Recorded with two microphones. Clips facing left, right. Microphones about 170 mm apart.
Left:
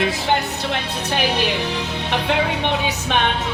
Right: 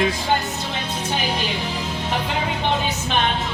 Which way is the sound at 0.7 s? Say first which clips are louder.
Left 2 dB; 75° left (ahead or behind).